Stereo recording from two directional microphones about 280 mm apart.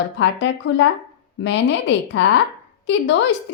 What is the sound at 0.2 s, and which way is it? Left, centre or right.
A woman's voice, left.